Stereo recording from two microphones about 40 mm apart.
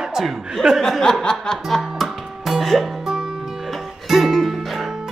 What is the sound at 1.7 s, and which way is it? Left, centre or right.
Music, centre.